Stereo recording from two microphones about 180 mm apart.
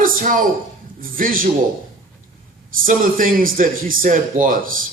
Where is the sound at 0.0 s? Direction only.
50° right (ahead or behind).